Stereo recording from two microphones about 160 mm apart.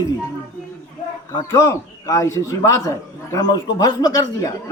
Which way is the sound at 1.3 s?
20° left (ahead or behind).